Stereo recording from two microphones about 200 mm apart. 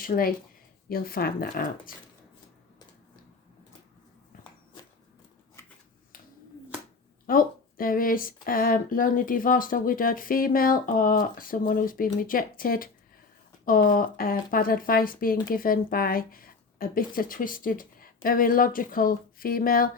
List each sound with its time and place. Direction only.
0.0 s speech: 45° left (ahead or behind)
7.3 s speech: 45° left (ahead or behind)